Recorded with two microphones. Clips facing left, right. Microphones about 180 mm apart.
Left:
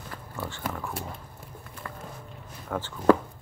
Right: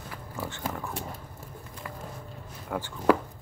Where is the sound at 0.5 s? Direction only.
20° right (ahead or behind).